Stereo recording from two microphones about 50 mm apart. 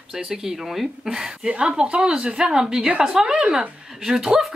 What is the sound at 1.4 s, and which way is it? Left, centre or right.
Speech, right.